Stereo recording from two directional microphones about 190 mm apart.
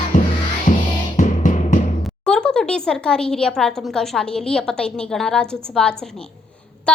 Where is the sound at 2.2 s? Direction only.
5° left (ahead or behind).